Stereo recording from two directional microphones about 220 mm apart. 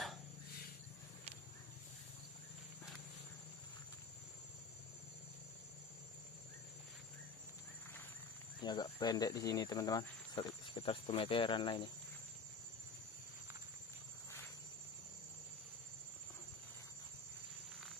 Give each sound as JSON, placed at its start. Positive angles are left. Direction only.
{"t": 8.6, "sound": "speech", "side_deg": 20}